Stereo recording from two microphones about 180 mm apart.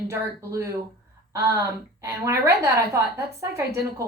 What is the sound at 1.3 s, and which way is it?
Speech, 20° right (ahead or behind).